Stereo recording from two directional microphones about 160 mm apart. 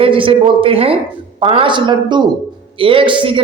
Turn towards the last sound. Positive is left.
turn(degrees=-30)  # may be behind; listen again after turning